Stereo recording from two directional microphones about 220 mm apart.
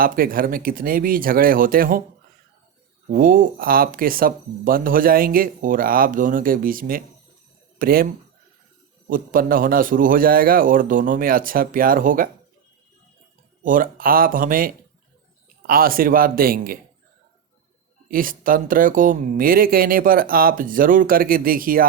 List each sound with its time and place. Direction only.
0.0 s speech: 40° right (ahead or behind)
3.1 s speech: 40° right (ahead or behind)
9.0 s speech: 40° right (ahead or behind)
13.6 s speech: 40° right (ahead or behind)
18.1 s speech: 40° right (ahead or behind)